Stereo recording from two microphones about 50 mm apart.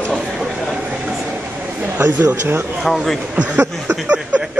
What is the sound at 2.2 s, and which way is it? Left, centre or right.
Speech, right.